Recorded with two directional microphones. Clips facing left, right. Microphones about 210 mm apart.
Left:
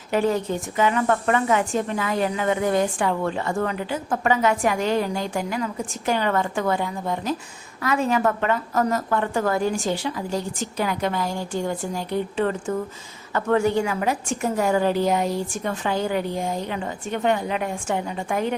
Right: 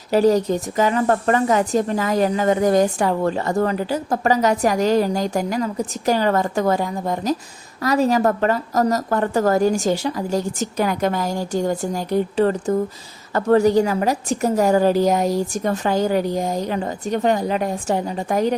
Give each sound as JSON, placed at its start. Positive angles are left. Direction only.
{"t": 0.1, "sound": "speech", "side_deg": -40}